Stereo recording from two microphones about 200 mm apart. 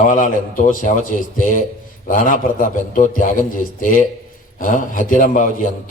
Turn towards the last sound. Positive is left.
turn(degrees=40)  # may be behind; listen again after turning